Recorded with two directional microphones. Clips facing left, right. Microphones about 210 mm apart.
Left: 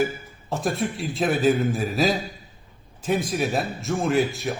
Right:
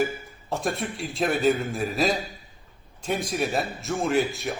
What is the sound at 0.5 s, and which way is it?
A man's voice, centre (ahead or behind).